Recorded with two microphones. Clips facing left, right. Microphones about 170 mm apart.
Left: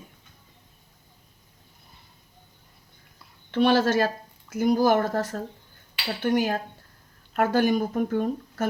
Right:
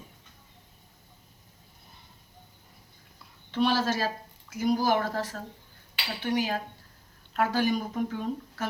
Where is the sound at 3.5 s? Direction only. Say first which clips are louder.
Left 6 dB; 60° left (ahead or behind).